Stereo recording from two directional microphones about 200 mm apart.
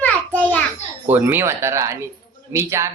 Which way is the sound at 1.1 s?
10° right (ahead or behind).